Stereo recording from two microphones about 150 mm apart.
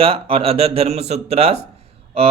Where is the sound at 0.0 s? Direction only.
40° right (ahead or behind).